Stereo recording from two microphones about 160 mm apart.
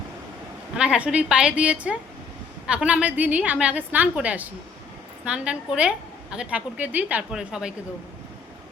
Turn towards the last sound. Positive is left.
turn(degrees=-5)  # may be behind; listen again after turning